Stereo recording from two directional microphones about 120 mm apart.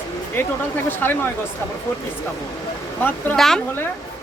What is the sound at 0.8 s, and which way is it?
Speech, 15° left (ahead or behind).